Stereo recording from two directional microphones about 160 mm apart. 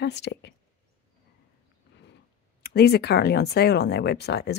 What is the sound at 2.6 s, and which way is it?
A woman's voice, 90° left.